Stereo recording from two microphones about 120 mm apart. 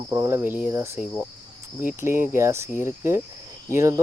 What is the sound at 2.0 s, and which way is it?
Speech, 20° right (ahead or behind).